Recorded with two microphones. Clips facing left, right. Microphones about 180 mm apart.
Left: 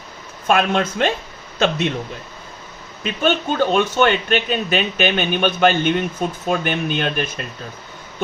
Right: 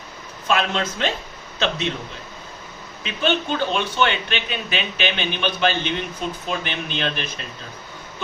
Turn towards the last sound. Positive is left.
turn(degrees=50)  # may be behind; listen again after turning